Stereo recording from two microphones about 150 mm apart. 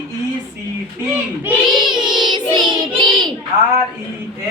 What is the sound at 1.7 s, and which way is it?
Child singing, 30° right (ahead or behind).